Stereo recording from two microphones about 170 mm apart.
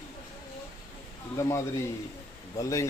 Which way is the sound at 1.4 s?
20° left (ahead or behind).